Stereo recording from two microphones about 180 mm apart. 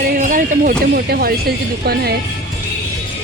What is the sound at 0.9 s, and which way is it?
A woman's voice, 60° right (ahead or behind).